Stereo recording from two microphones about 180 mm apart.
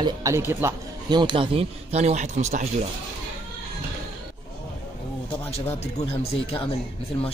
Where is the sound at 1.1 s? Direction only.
25° right (ahead or behind).